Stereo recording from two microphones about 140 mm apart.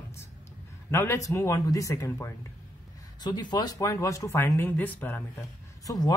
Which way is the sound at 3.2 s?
30° left (ahead or behind).